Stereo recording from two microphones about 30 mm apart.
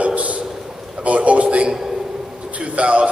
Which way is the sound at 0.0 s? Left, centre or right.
Right.